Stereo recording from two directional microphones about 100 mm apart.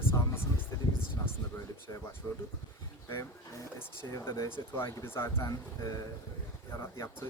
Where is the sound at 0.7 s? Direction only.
35° left (ahead or behind).